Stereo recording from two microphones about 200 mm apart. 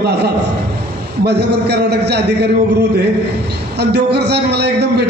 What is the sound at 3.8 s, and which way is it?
A man's voice, 55° right (ahead or behind).